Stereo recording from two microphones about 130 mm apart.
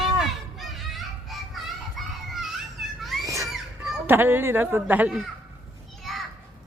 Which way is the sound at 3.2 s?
25° right (ahead or behind).